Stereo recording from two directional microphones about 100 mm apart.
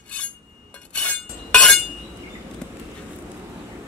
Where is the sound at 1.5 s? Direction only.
10° left (ahead or behind).